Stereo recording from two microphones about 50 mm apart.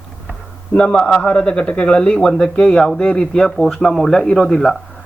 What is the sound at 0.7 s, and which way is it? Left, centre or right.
Speech, left.